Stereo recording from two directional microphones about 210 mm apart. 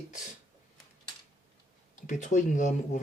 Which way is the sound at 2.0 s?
35° left (ahead or behind).